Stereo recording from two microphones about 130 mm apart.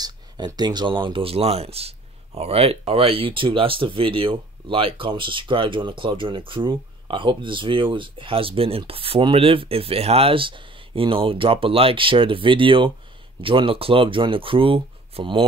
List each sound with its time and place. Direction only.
0.0 s speech: 30° right (ahead or behind)